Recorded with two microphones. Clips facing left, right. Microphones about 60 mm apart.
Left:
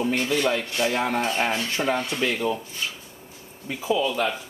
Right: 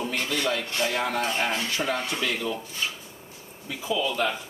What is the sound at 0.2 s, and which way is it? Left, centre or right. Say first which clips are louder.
Speech: left 4 dB; centre.